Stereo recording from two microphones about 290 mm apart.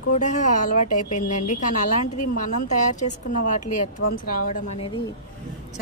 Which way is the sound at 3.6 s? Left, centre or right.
Left.